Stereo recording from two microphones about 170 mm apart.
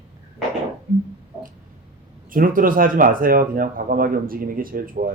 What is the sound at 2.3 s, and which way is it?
Speech, 55° right (ahead or behind).